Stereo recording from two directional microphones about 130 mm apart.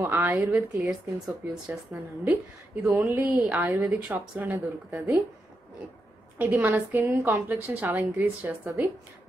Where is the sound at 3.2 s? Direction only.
5° right (ahead or behind).